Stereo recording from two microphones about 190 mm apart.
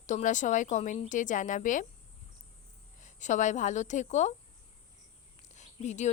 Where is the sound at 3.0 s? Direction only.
40° left (ahead or behind).